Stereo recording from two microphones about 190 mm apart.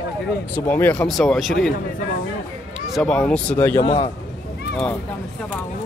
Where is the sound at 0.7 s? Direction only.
10° left (ahead or behind).